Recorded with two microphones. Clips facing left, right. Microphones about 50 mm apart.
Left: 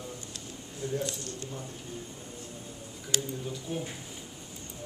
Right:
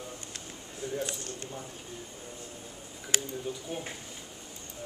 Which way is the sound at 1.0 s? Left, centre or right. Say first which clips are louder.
Left 1 dB; right.